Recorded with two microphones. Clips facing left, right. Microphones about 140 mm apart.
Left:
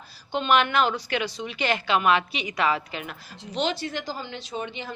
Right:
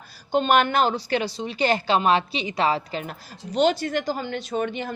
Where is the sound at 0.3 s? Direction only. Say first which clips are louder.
Right 3 dB; 45° right (ahead or behind).